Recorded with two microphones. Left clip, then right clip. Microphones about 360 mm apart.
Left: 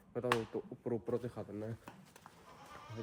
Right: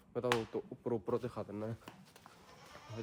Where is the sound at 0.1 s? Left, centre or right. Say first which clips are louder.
Right 1 dB; centre.